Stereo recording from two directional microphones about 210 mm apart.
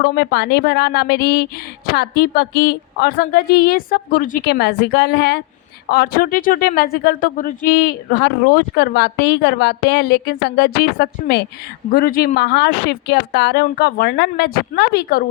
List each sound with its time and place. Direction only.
0.0 s speech: 50° left (ahead or behind)